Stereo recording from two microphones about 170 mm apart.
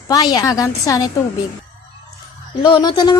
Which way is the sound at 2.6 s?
30° left (ahead or behind).